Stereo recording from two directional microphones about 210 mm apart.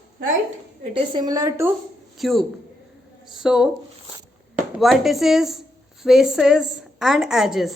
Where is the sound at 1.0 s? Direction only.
20° right (ahead or behind).